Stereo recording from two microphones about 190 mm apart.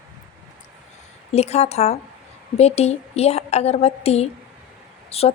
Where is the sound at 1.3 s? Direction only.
35° left (ahead or behind).